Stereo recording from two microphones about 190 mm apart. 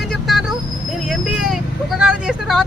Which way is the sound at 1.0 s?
5° right (ahead or behind).